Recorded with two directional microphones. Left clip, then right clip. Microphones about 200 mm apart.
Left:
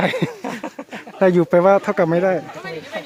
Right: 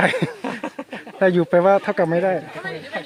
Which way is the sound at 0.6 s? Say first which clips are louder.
Right 1 dB; 55° right (ahead or behind).